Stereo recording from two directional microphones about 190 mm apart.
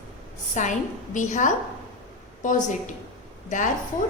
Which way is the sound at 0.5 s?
40° left (ahead or behind).